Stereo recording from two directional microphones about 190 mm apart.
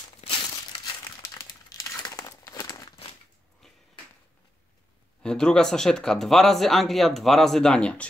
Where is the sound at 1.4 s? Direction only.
20° left (ahead or behind).